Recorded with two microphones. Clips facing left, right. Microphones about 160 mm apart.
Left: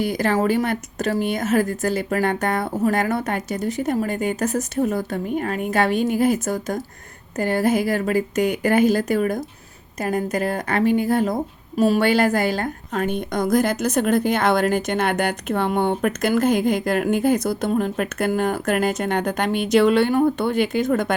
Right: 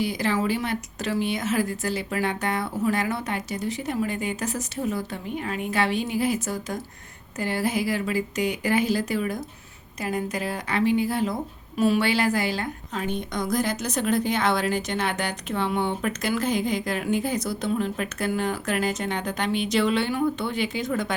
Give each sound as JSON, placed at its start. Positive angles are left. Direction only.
{"t": 0.0, "sound": "a woman's voice", "side_deg": 50}